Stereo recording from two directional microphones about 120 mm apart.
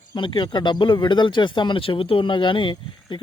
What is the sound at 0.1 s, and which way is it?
Speech, 40° left (ahead or behind).